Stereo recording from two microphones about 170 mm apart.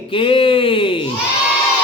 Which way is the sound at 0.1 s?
30° left (ahead or behind).